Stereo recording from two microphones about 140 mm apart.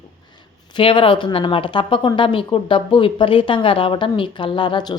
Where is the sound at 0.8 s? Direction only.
40° left (ahead or behind).